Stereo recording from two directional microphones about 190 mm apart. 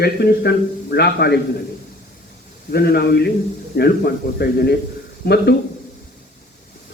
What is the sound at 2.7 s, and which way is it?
A man's voice, 55° left (ahead or behind).